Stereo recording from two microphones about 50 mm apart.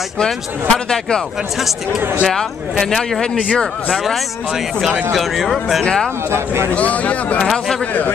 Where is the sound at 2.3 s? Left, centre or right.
Centre.